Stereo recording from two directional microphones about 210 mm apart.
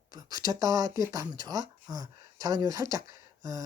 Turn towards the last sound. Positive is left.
turn(degrees=-15)  # may be behind; listen again after turning